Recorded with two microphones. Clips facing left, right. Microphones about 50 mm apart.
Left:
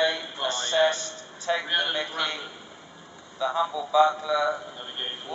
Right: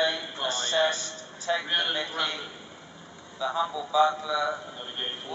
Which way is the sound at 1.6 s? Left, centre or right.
Centre.